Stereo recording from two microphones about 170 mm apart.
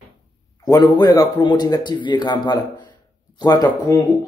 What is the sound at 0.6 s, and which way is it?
A man's voice, 25° left (ahead or behind).